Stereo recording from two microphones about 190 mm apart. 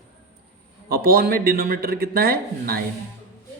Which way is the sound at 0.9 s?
55° right (ahead or behind).